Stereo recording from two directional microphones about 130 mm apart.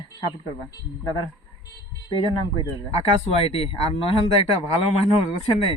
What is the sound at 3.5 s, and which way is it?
Speech, 45° left (ahead or behind).